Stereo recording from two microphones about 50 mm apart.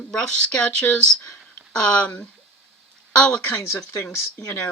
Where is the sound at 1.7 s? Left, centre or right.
Left.